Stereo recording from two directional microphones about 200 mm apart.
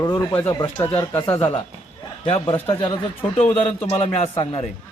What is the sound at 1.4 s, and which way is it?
A man's voice, 25° left (ahead or behind).